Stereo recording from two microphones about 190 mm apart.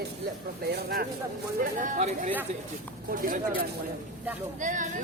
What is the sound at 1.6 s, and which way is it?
Speech, 40° right (ahead or behind).